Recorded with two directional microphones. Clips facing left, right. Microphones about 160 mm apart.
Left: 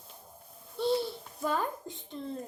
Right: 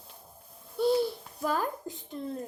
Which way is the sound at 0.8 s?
5° right (ahead or behind).